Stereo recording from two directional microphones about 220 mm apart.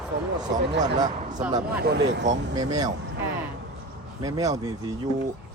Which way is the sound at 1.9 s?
50° right (ahead or behind).